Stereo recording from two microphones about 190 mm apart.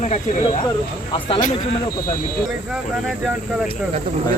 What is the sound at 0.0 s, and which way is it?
Speech, 40° left (ahead or behind).